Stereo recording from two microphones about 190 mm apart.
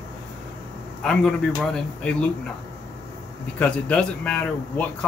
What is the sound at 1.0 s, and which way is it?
Speech, 5° left (ahead or behind).